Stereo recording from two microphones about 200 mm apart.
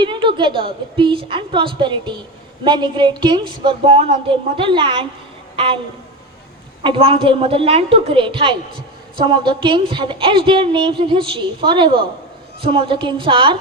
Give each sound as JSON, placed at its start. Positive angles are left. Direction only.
{"t": 0.0, "sound": "a woman's voice", "side_deg": -25}
{"t": 6.8, "sound": "a woman's voice", "side_deg": -25}